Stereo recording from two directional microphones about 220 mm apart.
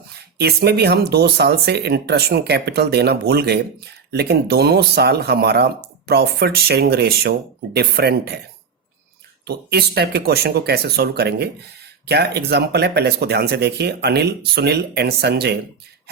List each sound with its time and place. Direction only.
0.3 s speech: 45° right (ahead or behind)
9.4 s speech: 45° right (ahead or behind)